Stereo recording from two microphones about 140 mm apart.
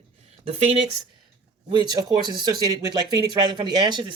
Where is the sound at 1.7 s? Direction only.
30° right (ahead or behind).